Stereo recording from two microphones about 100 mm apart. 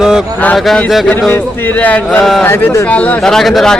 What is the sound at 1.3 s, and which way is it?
Speech, 20° left (ahead or behind).